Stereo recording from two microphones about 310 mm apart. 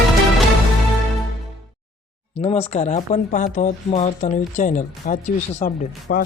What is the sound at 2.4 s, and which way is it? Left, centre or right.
A woman's voice, centre.